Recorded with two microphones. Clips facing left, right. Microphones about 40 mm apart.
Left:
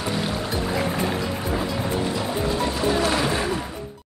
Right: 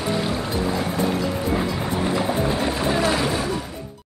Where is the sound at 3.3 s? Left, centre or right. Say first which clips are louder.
Even; left.